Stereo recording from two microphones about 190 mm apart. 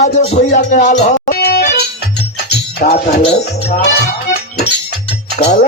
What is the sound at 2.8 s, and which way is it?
Speech, 35° left (ahead or behind).